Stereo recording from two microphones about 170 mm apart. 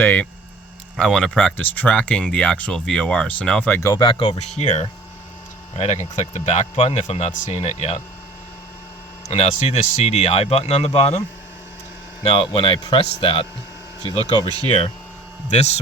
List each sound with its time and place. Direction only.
0.0 s speech: 10° left (ahead or behind); by 8.0 s 40° left (ahead or behind)
9.3 s speech: 40° left (ahead or behind)
12.2 s speech: 35° left (ahead or behind)
14.2 s speech: 25° right (ahead or behind)
15.4 s speech: 40° left (ahead or behind)